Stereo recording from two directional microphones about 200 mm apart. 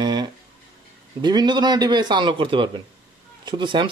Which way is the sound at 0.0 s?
20° right (ahead or behind).